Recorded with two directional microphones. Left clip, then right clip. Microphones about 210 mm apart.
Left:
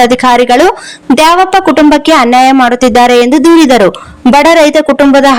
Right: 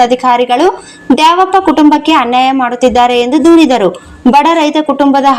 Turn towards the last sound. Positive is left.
turn(degrees=40)  # may be behind; listen again after turning